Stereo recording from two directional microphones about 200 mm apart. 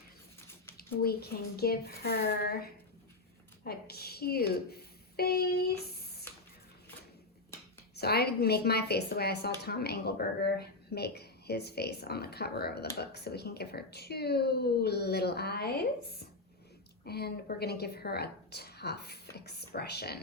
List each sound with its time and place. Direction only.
0.8 s a woman's voice: 50° left (ahead or behind)
7.9 s a woman's voice: 50° left (ahead or behind)
17.1 s a woman's voice: 55° left (ahead or behind)